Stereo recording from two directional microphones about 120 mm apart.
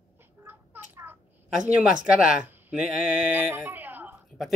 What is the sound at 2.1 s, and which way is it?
Speech, 10° right (ahead or behind).